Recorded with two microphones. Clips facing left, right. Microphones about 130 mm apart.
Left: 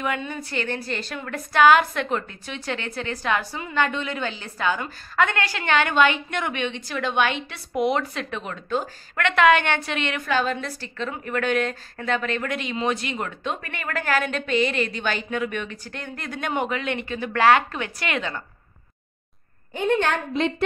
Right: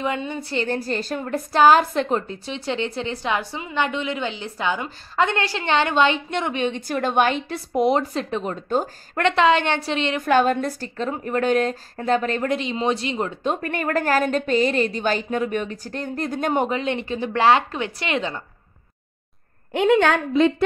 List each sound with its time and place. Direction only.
0.0 s a woman's voice: 25° right (ahead or behind)
0.7 s a woman's voice: 40° right (ahead or behind)
10.2 s a woman's voice: 50° right (ahead or behind); by 13.5 s 30° right (ahead or behind)
13.5 s a woman's voice: 45° right (ahead or behind); by 18.4 s 25° right (ahead or behind)
19.7 s a woman's voice: 90° right